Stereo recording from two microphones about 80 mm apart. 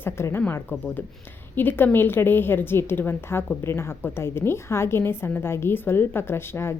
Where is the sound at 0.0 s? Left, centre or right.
Left.